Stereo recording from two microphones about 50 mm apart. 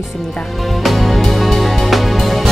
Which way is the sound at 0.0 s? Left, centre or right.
Centre.